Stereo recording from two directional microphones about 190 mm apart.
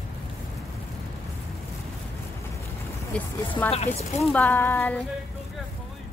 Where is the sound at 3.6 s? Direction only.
35° left (ahead or behind).